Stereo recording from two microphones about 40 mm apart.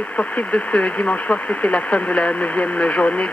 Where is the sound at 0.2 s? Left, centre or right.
Left.